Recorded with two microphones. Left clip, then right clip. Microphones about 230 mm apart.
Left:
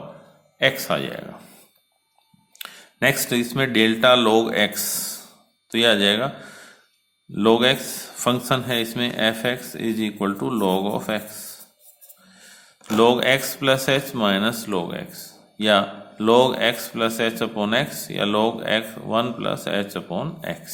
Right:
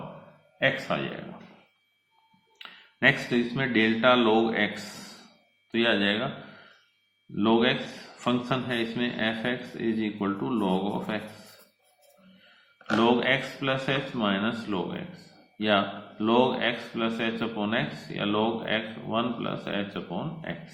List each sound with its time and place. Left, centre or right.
0.6 s a man's voice: left
2.6 s speech: left
5.7 s a man's voice: left
7.3 s a man's voice: left
13.0 s a man's voice: left